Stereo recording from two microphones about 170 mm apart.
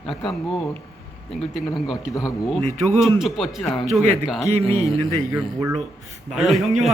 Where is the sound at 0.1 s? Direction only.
Centre (ahead or behind).